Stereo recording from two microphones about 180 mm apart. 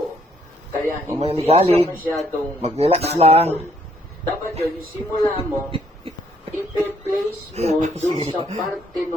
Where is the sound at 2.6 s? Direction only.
35° right (ahead or behind).